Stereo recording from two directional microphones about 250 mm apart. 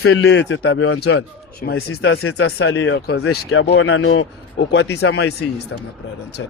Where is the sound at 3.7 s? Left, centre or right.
Left.